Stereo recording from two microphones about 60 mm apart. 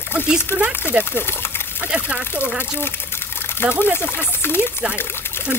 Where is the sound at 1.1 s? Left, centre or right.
Left.